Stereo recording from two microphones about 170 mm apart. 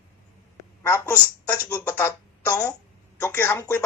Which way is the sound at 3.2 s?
15° left (ahead or behind).